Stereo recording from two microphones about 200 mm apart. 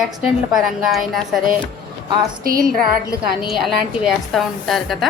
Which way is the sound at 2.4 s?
45° right (ahead or behind).